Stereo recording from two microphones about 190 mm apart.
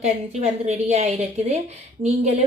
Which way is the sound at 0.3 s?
35° right (ahead or behind).